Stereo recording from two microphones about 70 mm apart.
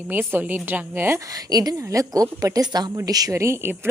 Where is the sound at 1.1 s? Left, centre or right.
Right.